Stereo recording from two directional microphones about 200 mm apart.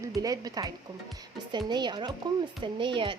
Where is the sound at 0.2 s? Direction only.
20° right (ahead or behind).